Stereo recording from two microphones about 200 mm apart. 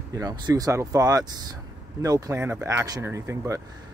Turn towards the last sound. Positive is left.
turn(degrees=-15)  # may be behind; listen again after turning